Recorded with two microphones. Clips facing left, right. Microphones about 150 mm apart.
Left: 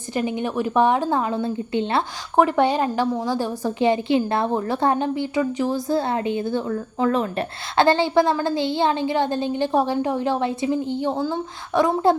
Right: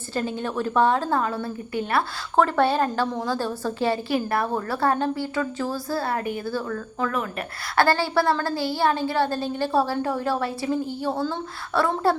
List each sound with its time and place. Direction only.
0.1 s a woman's voice: 15° left (ahead or behind)